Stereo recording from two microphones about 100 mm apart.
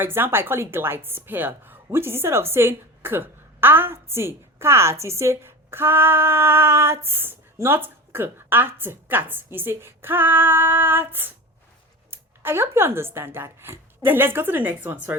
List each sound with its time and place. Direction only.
0.0 s a woman's voice: 20° right (ahead or behind)